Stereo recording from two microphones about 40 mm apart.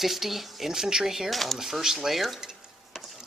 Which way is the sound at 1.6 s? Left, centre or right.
Centre.